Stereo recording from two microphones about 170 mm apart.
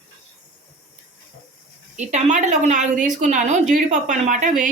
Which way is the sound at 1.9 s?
45° right (ahead or behind).